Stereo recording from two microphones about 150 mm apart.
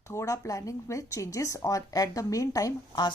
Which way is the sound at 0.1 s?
20° left (ahead or behind).